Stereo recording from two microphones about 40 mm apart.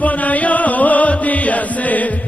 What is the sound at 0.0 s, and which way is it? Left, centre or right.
Music, left.